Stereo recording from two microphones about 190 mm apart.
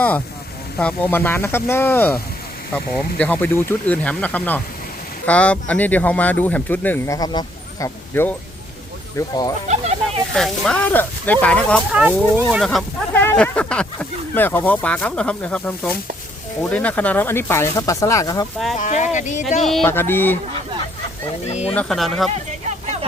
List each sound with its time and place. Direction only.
0.8 s speech: 5° left (ahead or behind)
10.3 s speech: centre (ahead or behind)
11.9 s speech: 5° right (ahead or behind); by 18.4 s 20° left (ahead or behind)
18.8 s speech: 40° left (ahead or behind)
19.8 s speech: 10° left (ahead or behind)
21.5 s speech: 35° left (ahead or behind)
21.8 s speech: centre (ahead or behind)
22.3 s a sound: 35° right (ahead or behind)